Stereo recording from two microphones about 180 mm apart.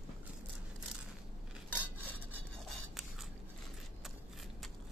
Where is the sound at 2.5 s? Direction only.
Centre (ahead or behind).